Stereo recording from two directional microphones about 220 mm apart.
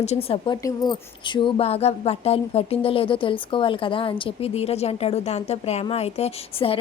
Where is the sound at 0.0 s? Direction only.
30° left (ahead or behind).